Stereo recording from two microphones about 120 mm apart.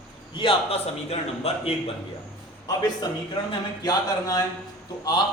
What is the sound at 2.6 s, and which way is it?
A man's voice, 35° left (ahead or behind).